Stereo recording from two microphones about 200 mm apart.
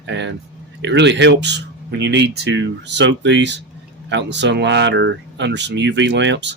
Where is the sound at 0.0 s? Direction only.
65° right (ahead or behind).